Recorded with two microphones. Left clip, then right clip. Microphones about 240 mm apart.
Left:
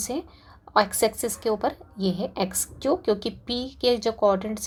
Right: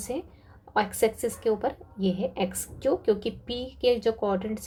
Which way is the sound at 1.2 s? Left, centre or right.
Left.